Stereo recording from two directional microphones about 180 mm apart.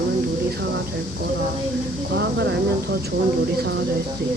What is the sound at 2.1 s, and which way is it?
Speech, 70° right (ahead or behind).